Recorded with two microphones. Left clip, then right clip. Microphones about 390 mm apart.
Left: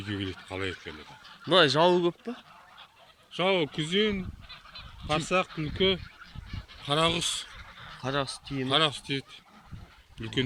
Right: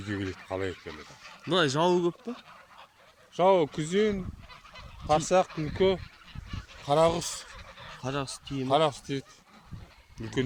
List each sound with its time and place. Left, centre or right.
0.1 s speech: right
1.5 s speech: centre
3.3 s speech: right
8.0 s speech: centre
8.7 s speech: right